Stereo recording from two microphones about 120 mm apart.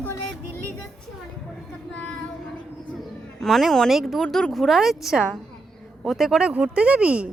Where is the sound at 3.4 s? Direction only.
Centre (ahead or behind).